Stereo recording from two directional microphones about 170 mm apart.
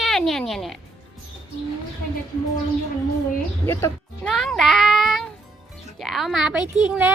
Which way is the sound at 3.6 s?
15° left (ahead or behind).